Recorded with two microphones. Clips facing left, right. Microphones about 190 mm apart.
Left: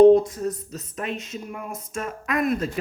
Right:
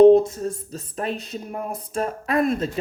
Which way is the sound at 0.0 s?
25° right (ahead or behind).